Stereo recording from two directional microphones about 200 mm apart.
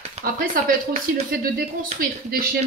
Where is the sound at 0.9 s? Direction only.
40° right (ahead or behind).